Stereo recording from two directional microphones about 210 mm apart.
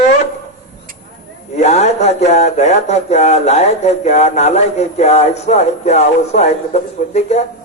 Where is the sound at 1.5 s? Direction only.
30° left (ahead or behind).